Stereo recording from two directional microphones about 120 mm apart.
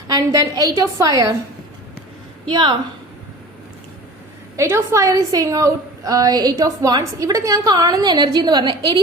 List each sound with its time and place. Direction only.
0.1 s a woman's voice: 30° right (ahead or behind)
2.5 s a woman's voice: 40° right (ahead or behind)
4.5 s a woman's voice: 20° right (ahead or behind)